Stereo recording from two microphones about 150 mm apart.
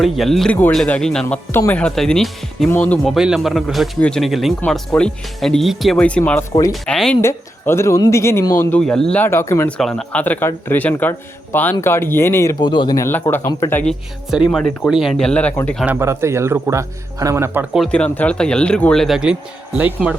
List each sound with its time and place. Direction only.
0.0 s a man's voice: centre (ahead or behind)
6.5 s speech: 20° left (ahead or behind)
6.8 s a man's voice: 5° left (ahead or behind)
7.2 s a man's voice: 15° left (ahead or behind)
8.8 s a man's voice: 5° left (ahead or behind)
9.1 s a man's voice: 15° left (ahead or behind)
9.7 s a man's voice: 5° left (ahead or behind)
12.6 s a man's voice: 30° left (ahead or behind)
13.8 s a man's voice: 5° right (ahead or behind)
16.0 s speech: 20° right (ahead or behind)
17.7 s a man's voice: 5° left (ahead or behind); by 20.1 s 10° right (ahead or behind)